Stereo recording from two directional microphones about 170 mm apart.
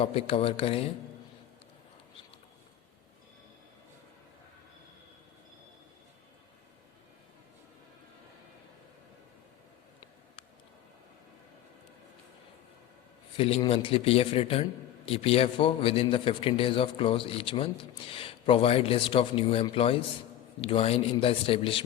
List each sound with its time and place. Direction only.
0.0 s a man's voice: 35° left (ahead or behind)
13.3 s a man's voice: 35° left (ahead or behind)